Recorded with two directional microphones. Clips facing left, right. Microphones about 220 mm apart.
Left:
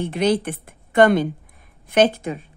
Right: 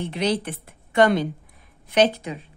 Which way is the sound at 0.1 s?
50° left (ahead or behind).